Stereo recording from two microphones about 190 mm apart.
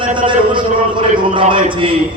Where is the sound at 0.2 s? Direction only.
25° right (ahead or behind).